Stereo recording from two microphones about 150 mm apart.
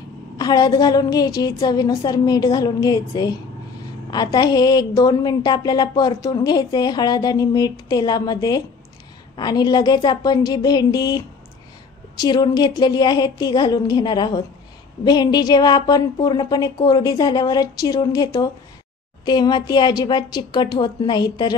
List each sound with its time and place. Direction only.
0.4 s a woman's voice: 25° left (ahead or behind)